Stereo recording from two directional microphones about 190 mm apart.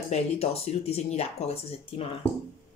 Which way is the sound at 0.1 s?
30° left (ahead or behind).